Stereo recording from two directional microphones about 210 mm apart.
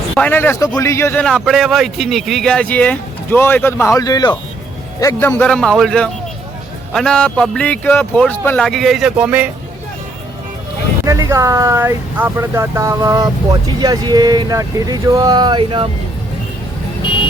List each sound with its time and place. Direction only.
0.1 s a man's voice: 10° left (ahead or behind)
11.0 s speech: 15° right (ahead or behind)